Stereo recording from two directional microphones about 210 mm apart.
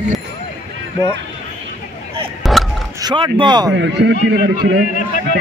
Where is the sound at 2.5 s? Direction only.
Centre (ahead or behind).